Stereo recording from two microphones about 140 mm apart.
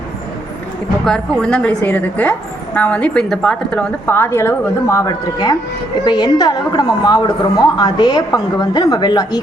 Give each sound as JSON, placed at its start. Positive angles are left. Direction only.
{"t": 1.0, "sound": "a woman's voice", "side_deg": 5}